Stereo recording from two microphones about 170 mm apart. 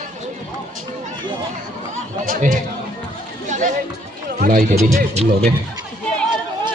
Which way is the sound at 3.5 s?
50° right (ahead or behind).